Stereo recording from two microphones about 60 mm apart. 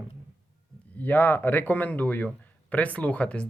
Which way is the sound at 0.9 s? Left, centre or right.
Left.